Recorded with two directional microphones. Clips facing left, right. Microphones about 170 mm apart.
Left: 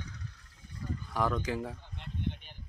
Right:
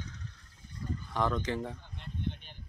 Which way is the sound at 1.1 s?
5° left (ahead or behind).